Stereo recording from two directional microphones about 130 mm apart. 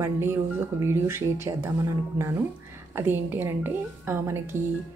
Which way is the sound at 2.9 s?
15° right (ahead or behind).